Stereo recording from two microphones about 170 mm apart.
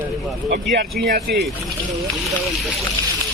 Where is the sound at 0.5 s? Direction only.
65° right (ahead or behind).